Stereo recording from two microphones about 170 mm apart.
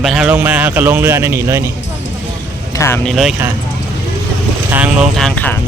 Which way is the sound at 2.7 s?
15° left (ahead or behind).